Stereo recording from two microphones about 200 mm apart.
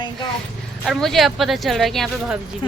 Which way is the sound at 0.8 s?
Centre (ahead or behind).